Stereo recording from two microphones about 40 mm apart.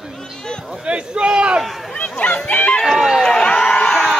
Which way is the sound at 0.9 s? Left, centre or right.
Right.